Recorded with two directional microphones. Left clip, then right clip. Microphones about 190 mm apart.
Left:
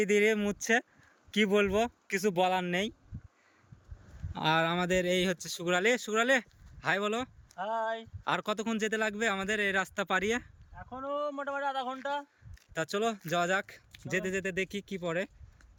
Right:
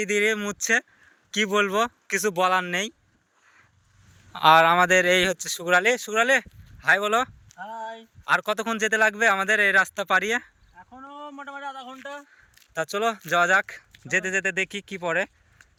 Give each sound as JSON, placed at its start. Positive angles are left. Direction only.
{"t": 0.0, "sound": "speech", "side_deg": 15}
{"t": 4.3, "sound": "speech", "side_deg": 5}
{"t": 7.5, "sound": "speech", "side_deg": 30}
{"t": 8.3, "sound": "speech", "side_deg": 5}
{"t": 10.9, "sound": "a sound", "side_deg": 25}
{"t": 11.3, "sound": "speech", "side_deg": 30}
{"t": 12.7, "sound": "speech", "side_deg": 10}